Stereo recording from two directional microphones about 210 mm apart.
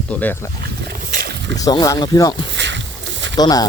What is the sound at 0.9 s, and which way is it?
Wild animals, 45° right (ahead or behind).